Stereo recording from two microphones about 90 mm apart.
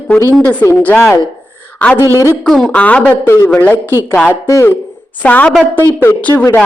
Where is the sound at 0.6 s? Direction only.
30° left (ahead or behind).